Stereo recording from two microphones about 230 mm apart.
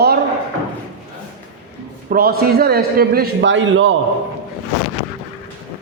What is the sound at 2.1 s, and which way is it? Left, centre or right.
A man's voice, right.